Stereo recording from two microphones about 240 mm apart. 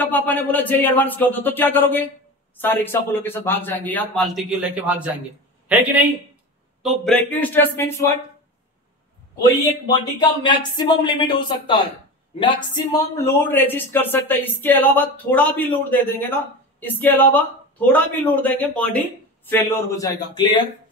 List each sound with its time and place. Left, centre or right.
0.0 s a man's voice: centre
10.4 s speech: centre